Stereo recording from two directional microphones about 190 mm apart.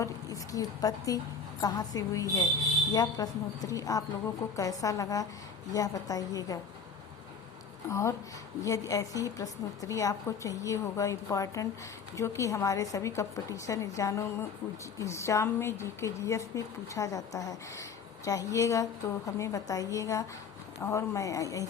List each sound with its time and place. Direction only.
0.0 s a woman's voice: 20° left (ahead or behind)
7.9 s a woman's voice: 15° left (ahead or behind)